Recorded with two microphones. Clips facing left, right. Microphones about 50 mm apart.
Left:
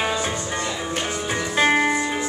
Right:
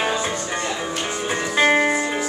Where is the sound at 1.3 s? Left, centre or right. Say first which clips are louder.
Right 2 dB; centre.